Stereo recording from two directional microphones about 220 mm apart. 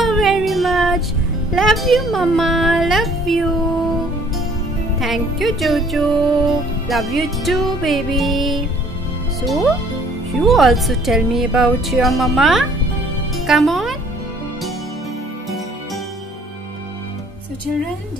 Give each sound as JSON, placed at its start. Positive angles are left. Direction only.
{"t": 0.0, "sound": "music", "side_deg": 0}
{"t": 5.0, "sound": "music", "side_deg": 0}